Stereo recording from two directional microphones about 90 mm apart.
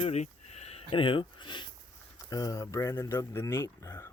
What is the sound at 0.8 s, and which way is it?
Speech, 85° left.